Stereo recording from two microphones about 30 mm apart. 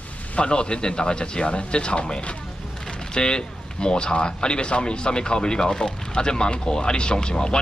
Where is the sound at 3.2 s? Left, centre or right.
Left.